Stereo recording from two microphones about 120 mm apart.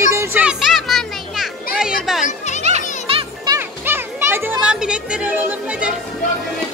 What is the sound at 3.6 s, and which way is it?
Children playing, 20° right (ahead or behind).